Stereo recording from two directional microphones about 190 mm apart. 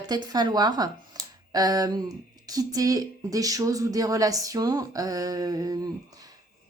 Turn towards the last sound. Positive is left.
turn(degrees=-20)  # may be behind; listen again after turning